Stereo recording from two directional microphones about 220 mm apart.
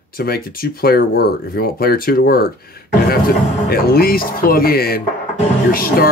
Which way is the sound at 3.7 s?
45° left (ahead or behind).